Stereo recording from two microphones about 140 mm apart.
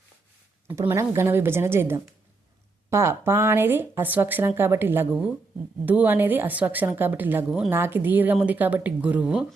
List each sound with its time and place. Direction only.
0.7 s speech: 20° right (ahead or behind)